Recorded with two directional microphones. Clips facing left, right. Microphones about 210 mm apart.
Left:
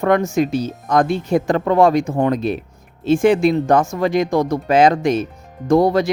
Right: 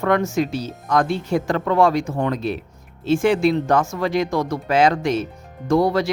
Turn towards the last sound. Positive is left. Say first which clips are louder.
# left 4 dB
turn(degrees=20)  # may be behind; listen again after turning